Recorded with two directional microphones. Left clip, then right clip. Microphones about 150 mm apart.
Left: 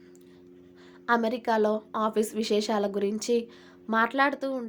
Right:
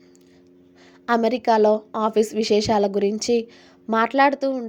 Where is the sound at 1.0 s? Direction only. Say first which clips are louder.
Right 6 dB; 35° right (ahead or behind).